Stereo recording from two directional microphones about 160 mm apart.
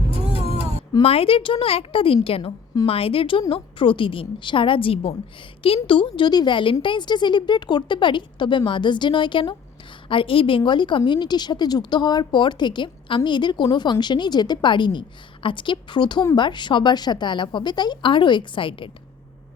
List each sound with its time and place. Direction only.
1.0 s a woman's voice: 35° left (ahead or behind)